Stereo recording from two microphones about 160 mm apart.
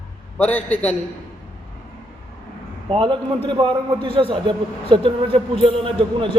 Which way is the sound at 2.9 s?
30° right (ahead or behind).